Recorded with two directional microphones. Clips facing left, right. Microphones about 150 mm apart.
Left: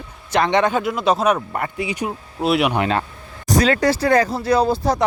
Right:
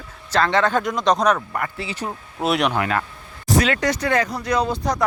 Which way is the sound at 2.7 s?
25° left (ahead or behind).